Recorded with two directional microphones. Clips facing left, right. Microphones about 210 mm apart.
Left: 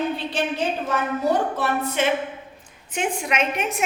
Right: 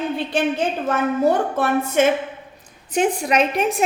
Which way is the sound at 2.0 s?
50° right (ahead or behind).